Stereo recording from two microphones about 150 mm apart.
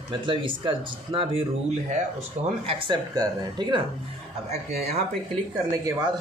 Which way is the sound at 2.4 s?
40° right (ahead or behind).